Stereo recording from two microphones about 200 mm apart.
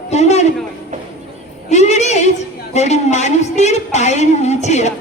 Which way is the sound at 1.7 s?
35° left (ahead or behind).